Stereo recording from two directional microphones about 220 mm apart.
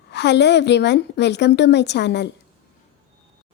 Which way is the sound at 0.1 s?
50° left (ahead or behind).